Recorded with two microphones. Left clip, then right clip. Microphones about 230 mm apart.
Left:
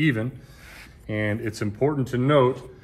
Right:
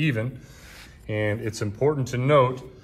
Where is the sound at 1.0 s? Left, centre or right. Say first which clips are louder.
Even; right.